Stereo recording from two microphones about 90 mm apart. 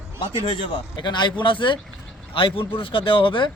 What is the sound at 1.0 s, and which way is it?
Speech, 60° left (ahead or behind).